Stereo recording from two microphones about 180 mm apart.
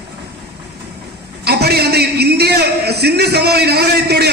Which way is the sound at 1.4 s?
60° right (ahead or behind).